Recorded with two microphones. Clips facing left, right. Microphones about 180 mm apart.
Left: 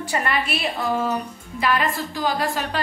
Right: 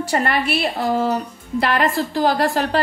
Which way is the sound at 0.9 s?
35° right (ahead or behind).